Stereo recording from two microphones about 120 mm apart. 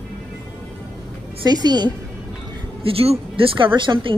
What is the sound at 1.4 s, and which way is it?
Speech, 35° right (ahead or behind).